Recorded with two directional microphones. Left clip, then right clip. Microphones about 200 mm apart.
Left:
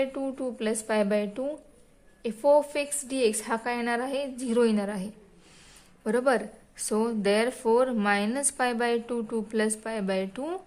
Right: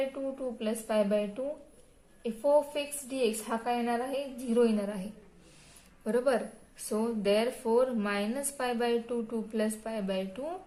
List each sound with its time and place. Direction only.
0.1 s a woman's voice: 45° left (ahead or behind)
6.1 s a woman's voice: 40° left (ahead or behind)